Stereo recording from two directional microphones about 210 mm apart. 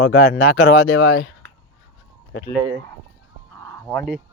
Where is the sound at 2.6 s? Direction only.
65° right (ahead or behind).